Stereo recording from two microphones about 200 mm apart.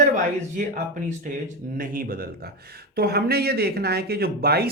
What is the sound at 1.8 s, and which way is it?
Speech, 45° right (ahead or behind).